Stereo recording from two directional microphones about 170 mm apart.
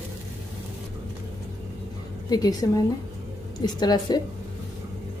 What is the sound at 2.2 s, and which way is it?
Speech, 20° left (ahead or behind).